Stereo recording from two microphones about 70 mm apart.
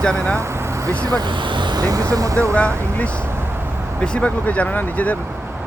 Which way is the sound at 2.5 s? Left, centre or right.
Centre.